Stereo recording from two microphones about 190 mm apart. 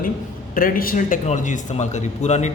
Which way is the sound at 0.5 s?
50° left (ahead or behind).